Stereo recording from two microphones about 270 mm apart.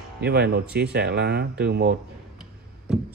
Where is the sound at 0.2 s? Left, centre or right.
Right.